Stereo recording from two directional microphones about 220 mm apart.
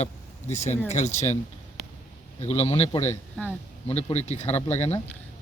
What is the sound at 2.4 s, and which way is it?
Speech, 25° left (ahead or behind).